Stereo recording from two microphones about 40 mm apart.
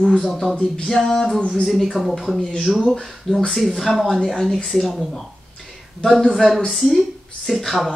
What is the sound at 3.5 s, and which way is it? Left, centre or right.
Speech, centre.